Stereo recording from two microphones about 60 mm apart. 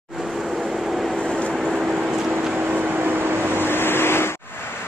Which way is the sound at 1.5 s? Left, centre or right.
Centre.